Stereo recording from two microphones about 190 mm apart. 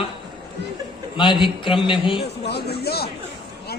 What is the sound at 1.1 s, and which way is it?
Music, 25° left (ahead or behind).